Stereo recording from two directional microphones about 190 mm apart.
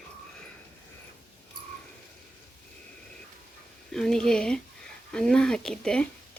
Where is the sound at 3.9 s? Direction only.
5° left (ahead or behind).